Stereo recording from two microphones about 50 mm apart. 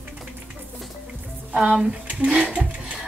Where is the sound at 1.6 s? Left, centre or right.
Centre.